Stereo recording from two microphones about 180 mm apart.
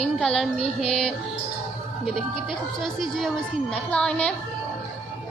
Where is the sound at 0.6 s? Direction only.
30° left (ahead or behind).